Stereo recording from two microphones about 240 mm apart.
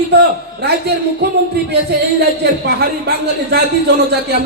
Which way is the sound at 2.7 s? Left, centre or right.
Right.